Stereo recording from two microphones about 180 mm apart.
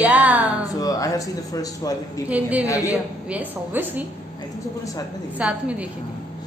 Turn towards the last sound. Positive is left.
turn(degrees=-5)  # may be behind; listen again after turning